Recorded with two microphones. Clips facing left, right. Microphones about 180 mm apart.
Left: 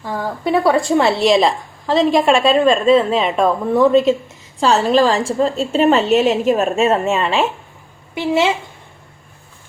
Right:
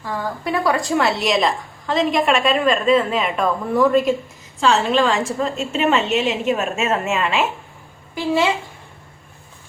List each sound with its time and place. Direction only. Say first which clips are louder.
0.0 s a woman's voice: left 3 dB; 30° left (ahead or behind)
8.1 s a woman's voice: left 2 dB; 20° left (ahead or behind)